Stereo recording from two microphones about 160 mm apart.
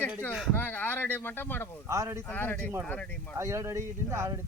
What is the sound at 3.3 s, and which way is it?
Speech, 20° right (ahead or behind).